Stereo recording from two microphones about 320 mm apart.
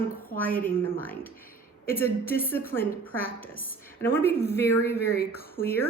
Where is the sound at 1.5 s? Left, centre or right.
Left.